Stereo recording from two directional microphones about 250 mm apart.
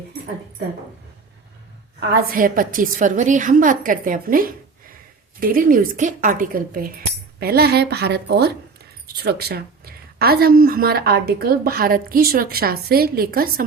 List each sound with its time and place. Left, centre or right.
2.0 s a woman's voice: right